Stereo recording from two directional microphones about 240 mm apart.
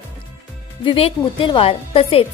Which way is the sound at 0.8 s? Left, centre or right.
Left.